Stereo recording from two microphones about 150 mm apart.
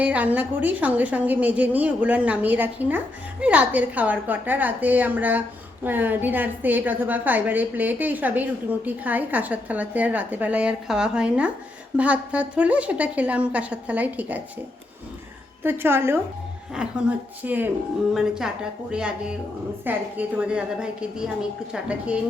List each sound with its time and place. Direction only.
0.0 s a woman's voice: 10° right (ahead or behind)
15.6 s a woman's voice: 15° right (ahead or behind)